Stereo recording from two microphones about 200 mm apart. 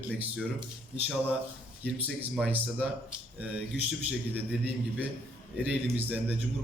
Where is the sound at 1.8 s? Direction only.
5° right (ahead or behind).